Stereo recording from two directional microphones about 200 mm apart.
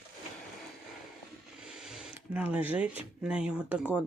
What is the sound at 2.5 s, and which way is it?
Speech, 5° right (ahead or behind).